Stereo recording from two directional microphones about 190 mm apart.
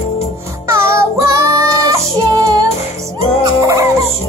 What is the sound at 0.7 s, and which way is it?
Child singing, 15° right (ahead or behind).